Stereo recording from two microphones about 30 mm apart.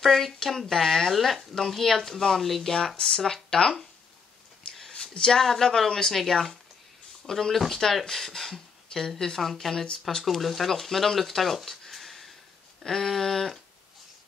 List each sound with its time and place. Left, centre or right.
0.0 s speech: centre
4.9 s a sound: left
5.4 s speech: centre
6.1 s speech: centre
7.5 s speech: centre
11.9 s a sound: centre
12.8 s speech: centre